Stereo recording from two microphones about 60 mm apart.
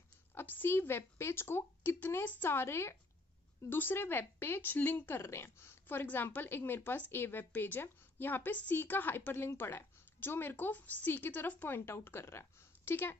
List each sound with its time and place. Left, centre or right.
0.3 s speech: left
11.8 s speech: left